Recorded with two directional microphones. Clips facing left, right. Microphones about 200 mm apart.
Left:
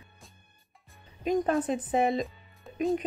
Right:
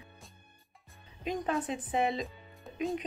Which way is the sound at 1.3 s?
45° left (ahead or behind).